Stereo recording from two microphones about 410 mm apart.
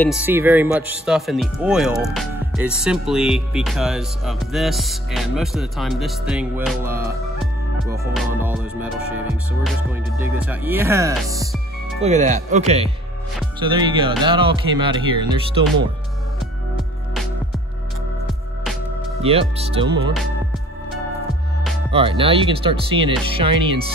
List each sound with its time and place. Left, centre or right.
0.0 s speech: centre
19.2 s speech: centre
21.9 s speech: centre